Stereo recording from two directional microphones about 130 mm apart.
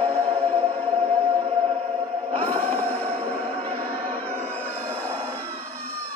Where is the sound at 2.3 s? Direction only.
50° right (ahead or behind).